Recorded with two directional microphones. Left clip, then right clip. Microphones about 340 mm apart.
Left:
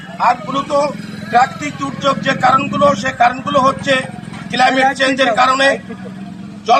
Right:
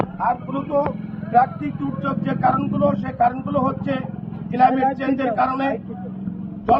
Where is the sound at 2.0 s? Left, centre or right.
Left.